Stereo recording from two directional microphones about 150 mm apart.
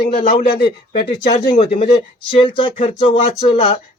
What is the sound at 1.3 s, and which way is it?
Speech, 55° left (ahead or behind).